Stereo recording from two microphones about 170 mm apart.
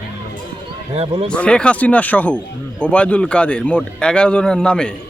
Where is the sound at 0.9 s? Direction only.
35° right (ahead or behind).